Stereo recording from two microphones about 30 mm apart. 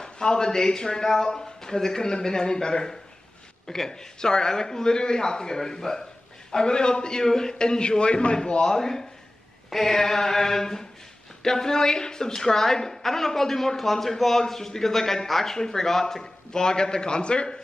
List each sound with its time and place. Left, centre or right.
0.0 s a man's voice: left
8.6 s a woman's voice: centre
15.5 s a man's voice: centre; by 17.6 s left